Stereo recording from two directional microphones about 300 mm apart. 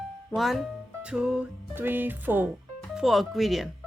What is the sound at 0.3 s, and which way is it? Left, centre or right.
Speech, centre.